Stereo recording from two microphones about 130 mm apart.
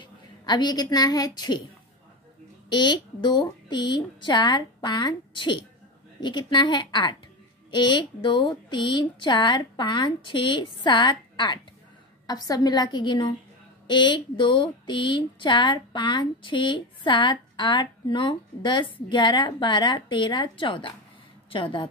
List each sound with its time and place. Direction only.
0.0 s a woman's voice: 35° left (ahead or behind)
2.7 s a woman's voice: 35° left (ahead or behind)